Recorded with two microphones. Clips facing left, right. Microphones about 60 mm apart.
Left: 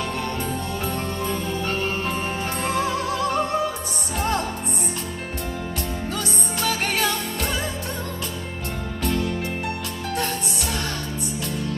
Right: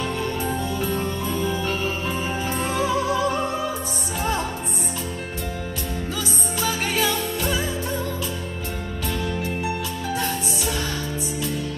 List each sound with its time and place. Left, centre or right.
0.7 s music: left
6.1 s music: left
10.1 s music: left